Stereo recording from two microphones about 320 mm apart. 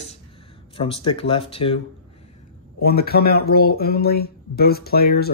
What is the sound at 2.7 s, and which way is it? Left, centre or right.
Speech, left.